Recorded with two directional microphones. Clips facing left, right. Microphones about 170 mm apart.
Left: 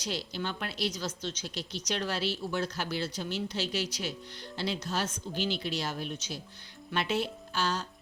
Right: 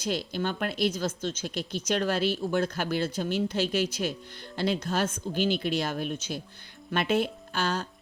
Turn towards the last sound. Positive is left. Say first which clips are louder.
# right 2 dB
turn(degrees=-55)  # may be behind; listen again after turning